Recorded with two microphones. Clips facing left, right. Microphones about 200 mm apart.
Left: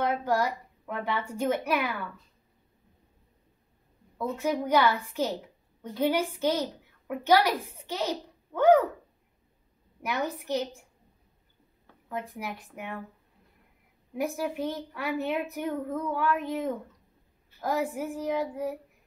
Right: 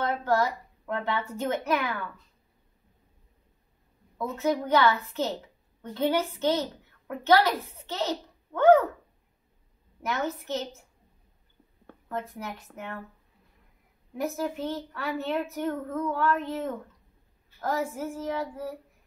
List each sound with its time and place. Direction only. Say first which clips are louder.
0.0 s a woman's voice: right 1 dB; 10° left (ahead or behind)
4.2 s a woman's voice: right 1 dB; 10° left (ahead or behind)
10.0 s a woman's voice: even; 15° left (ahead or behind)
12.1 s a woman's voice: right 1 dB; 15° left (ahead or behind)
14.1 s a woman's voice: even; 15° left (ahead or behind)